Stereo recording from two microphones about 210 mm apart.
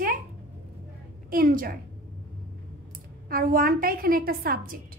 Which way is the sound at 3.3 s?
45° right (ahead or behind).